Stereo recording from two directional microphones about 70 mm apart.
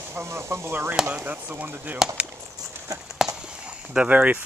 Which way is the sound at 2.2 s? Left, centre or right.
Centre.